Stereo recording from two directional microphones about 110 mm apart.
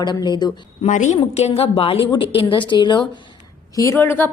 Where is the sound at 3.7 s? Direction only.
25° left (ahead or behind).